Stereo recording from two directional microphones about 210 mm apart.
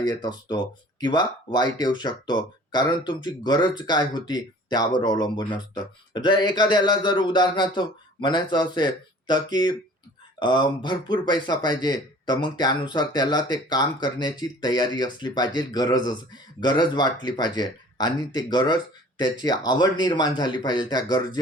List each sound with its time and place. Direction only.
0.1 s a man's voice: 20° left (ahead or behind)